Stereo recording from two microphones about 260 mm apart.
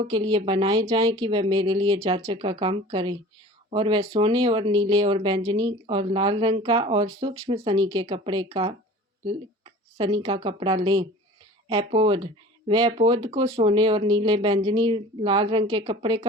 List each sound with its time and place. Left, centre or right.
0.0 s speech: centre